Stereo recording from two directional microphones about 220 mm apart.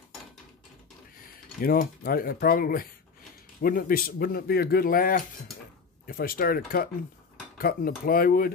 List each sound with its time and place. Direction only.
1.6 s speech: 40° left (ahead or behind)